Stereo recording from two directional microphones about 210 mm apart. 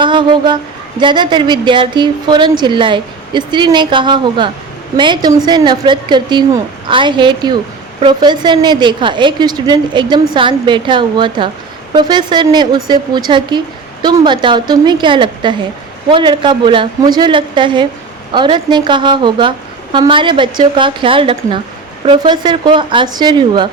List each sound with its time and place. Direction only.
0.0 s speech: 20° right (ahead or behind)